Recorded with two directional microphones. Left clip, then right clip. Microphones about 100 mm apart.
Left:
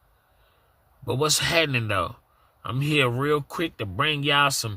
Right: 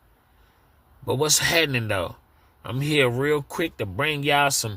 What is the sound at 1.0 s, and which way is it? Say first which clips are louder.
Speech: right 2 dB; 15° left (ahead or behind).